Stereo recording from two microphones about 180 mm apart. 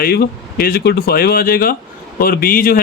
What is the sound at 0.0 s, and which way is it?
Speech, 60° left (ahead or behind).